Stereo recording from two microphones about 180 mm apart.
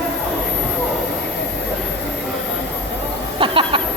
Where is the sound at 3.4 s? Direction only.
30° right (ahead or behind).